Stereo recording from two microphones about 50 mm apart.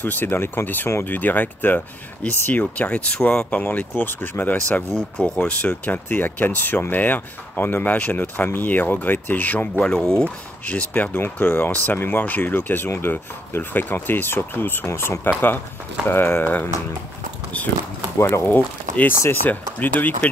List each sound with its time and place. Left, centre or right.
0.0 s speech: left
1.0 s speech: left
3.9 s speech: left
9.8 s speech: centre
10.2 s speech: left
11.1 s speech: left
18.1 s speech: left
18.5 s speech: left